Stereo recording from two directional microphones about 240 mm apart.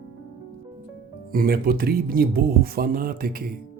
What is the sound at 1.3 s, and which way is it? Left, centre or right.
Speech, right.